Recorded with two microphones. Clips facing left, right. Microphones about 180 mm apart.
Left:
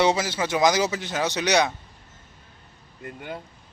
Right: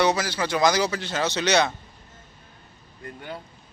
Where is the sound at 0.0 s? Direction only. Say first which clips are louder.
Left 1 dB; 25° left (ahead or behind).